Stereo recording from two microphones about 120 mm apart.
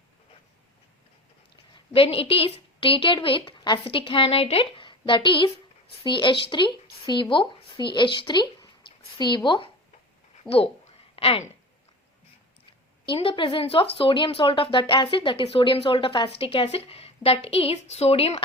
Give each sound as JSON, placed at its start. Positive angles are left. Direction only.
{"t": 1.7, "sound": "a woman's voice", "side_deg": 50}
{"t": 3.8, "sound": "speech", "side_deg": 50}
{"t": 10.5, "sound": "a sound", "side_deg": 55}
{"t": 13.1, "sound": "a woman's voice", "side_deg": 45}